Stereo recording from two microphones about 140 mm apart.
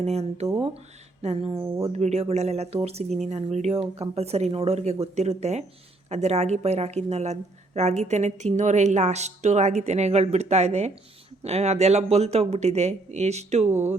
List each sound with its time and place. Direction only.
0.0 s a woman's voice: 50° right (ahead or behind)
1.6 s speech: 20° right (ahead or behind)
1.9 s a woman's voice: 50° right (ahead or behind)
13.7 s speech: 15° right (ahead or behind)